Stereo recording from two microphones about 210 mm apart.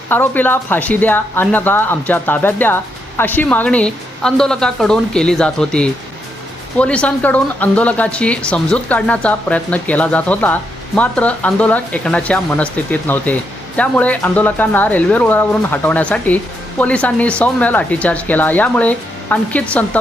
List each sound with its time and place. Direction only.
0.1 s speech: 10° left (ahead or behind)